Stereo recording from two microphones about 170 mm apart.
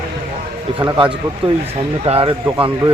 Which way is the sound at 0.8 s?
25° right (ahead or behind).